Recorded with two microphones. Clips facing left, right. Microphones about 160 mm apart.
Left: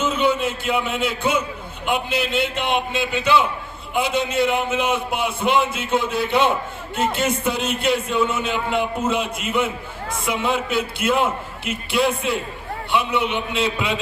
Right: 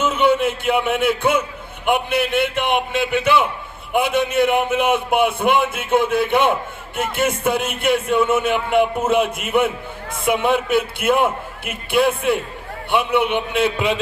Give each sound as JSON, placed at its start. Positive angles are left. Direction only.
{"t": 0.0, "sound": "a man's voice", "side_deg": -60}